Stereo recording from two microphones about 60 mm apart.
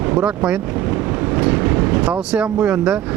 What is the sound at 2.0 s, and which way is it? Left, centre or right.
Speech, centre.